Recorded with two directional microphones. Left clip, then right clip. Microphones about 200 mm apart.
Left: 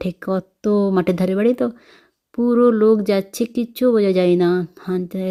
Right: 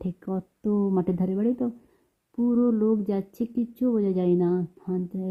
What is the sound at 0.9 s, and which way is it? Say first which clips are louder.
Speech: left 9 dB; 10° left (ahead or behind).